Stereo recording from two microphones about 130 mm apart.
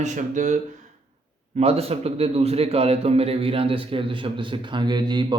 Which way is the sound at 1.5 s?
50° right (ahead or behind).